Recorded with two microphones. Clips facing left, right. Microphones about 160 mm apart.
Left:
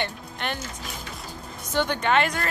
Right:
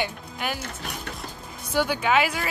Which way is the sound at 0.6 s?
60° right (ahead or behind).